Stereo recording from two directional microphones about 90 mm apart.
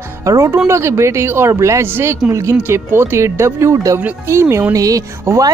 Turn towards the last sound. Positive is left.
turn(degrees=-40)  # may be behind; listen again after turning